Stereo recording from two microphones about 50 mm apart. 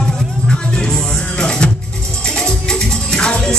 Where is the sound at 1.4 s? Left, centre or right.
Centre.